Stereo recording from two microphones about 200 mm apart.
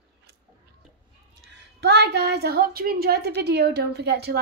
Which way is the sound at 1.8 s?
60° right (ahead or behind).